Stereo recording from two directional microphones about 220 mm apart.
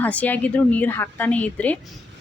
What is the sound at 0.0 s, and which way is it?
A woman's voice, 5° left (ahead or behind).